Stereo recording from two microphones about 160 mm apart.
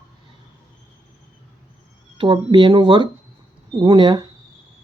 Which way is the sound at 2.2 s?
30° right (ahead or behind).